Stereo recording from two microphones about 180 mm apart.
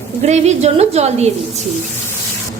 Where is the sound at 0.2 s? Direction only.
35° right (ahead or behind).